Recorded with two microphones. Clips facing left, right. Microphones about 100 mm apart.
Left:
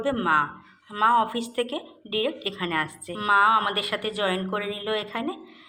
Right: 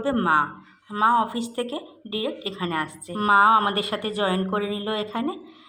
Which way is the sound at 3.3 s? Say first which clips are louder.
Right 3 dB; 35° right (ahead or behind).